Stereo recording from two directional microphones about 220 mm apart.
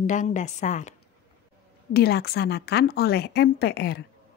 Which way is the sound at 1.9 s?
45° left (ahead or behind).